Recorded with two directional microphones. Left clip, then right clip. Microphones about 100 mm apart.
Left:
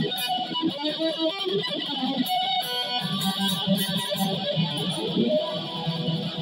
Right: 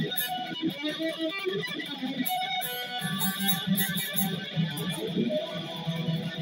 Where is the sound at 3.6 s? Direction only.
45° left (ahead or behind).